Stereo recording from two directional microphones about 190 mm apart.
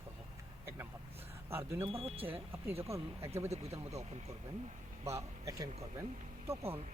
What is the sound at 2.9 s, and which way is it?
Speech, 15° right (ahead or behind).